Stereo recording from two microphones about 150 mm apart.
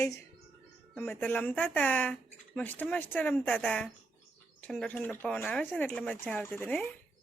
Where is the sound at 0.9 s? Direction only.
5° left (ahead or behind).